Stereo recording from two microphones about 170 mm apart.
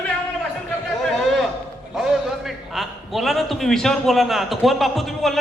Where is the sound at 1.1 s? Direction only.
Centre (ahead or behind).